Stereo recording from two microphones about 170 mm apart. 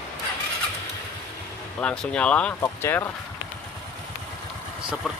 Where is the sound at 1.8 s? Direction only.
5° left (ahead or behind).